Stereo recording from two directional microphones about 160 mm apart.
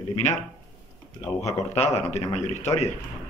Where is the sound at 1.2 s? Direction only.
20° left (ahead or behind).